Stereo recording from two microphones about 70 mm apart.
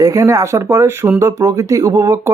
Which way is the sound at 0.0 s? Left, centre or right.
Right.